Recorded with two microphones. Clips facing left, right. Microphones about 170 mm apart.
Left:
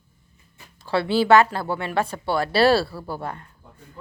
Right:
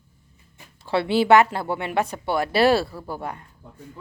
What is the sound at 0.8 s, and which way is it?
Speech, 25° right (ahead or behind).